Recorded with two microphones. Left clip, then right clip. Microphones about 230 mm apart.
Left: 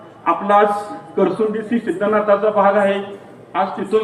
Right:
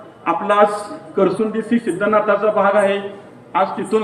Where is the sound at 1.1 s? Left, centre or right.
Centre.